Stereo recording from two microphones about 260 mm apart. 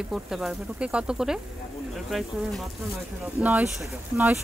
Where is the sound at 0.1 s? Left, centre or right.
Centre.